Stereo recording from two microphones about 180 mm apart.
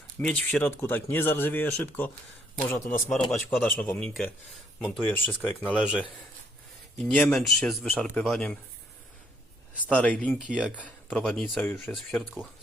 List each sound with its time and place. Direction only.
0.2 s speech: 5° left (ahead or behind)
3.1 s speech: centre (ahead or behind)
5.7 s speech: 5° right (ahead or behind)
9.8 s speech: 5° left (ahead or behind)
10.4 s speech: 5° right (ahead or behind)
10.8 s speech: 5° left (ahead or behind)